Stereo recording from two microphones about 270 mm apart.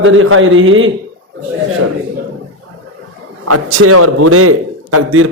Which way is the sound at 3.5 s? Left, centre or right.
Right.